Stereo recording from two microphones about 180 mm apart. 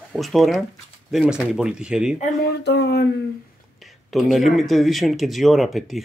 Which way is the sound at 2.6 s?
70° left (ahead or behind).